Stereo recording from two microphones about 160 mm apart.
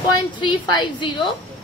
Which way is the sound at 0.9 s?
30° left (ahead or behind).